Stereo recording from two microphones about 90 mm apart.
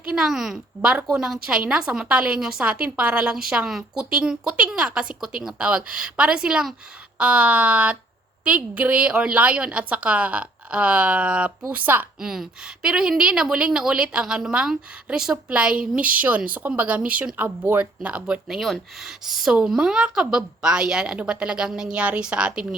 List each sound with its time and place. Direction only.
0.1 s a woman's voice: 5° right (ahead or behind); by 12.0 s 20° right (ahead or behind)
12.2 s speech: 5° right (ahead or behind)